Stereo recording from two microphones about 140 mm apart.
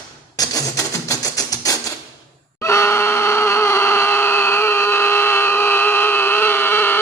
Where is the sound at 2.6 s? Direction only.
20° left (ahead or behind).